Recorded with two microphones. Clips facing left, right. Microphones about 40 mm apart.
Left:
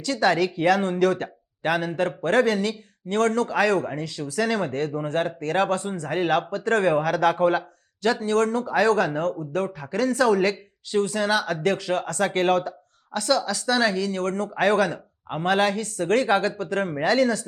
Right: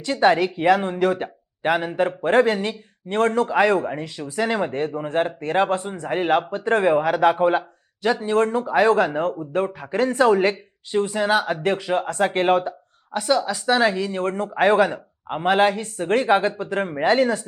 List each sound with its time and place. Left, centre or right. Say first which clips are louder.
0.0 s speech: right 3 dB; right